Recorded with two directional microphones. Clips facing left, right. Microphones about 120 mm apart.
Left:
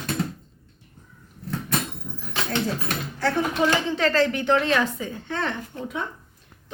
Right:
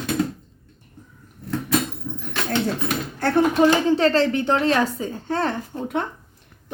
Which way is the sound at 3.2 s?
55° right (ahead or behind).